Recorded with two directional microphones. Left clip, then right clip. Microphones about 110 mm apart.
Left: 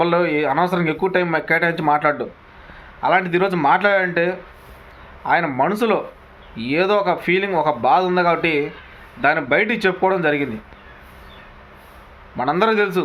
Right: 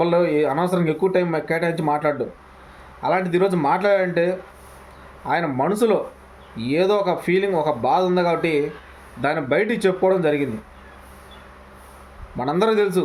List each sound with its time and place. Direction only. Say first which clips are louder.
0.0 s a man's voice: left 1 dB; 20° right (ahead or behind)
12.4 s a man's voice: left 2 dB; 20° right (ahead or behind)